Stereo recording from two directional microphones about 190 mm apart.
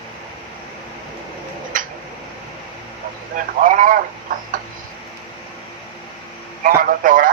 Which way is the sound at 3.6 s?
45° right (ahead or behind).